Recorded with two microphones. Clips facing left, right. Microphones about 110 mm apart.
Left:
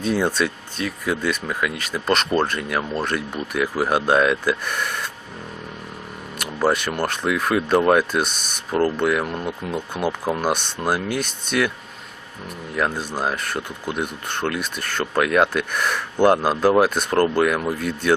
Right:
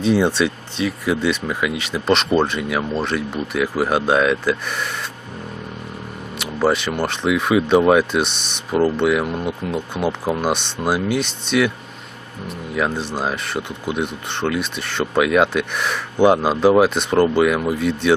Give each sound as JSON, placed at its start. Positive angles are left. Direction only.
{"t": 0.0, "sound": "speech", "side_deg": 5}
{"t": 6.4, "sound": "speech", "side_deg": 0}
{"t": 12.9, "sound": "speech", "side_deg": 10}